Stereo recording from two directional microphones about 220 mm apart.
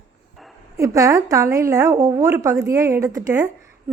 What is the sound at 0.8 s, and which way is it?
A woman's voice, 15° right (ahead or behind).